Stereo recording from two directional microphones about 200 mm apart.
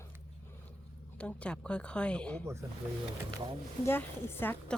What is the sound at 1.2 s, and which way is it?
Speech, 5° left (ahead or behind).